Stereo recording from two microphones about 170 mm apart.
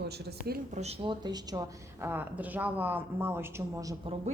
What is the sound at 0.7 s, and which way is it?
Speech, 40° right (ahead or behind).